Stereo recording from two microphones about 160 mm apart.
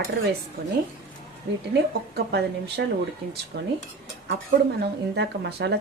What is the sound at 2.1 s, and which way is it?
Speech, 90° right.